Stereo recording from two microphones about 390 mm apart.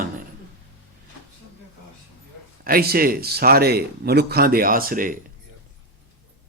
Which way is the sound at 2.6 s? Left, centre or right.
Right.